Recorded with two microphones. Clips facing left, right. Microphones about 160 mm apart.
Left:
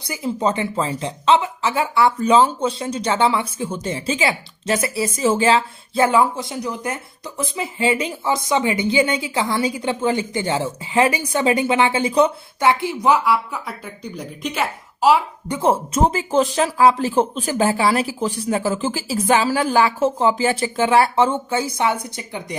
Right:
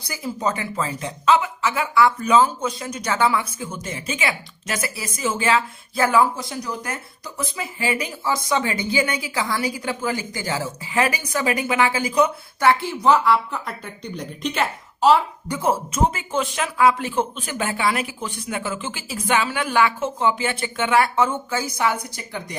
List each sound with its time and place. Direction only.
0.1 s speech: 25° left (ahead or behind); by 15.2 s 5° left (ahead or behind)
15.4 s speech: 25° left (ahead or behind)
15.9 s speech: 35° left (ahead or behind)